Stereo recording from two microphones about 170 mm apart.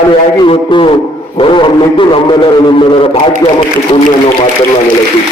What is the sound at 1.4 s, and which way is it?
Speech, 30° left (ahead or behind).